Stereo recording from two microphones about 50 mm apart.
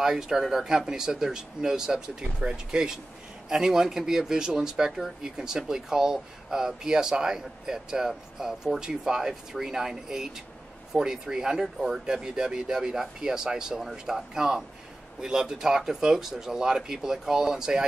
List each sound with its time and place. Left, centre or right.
0.0 s speech: centre